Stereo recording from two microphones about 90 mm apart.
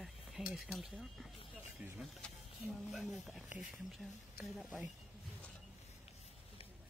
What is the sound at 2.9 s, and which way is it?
Speech, centre (ahead or behind).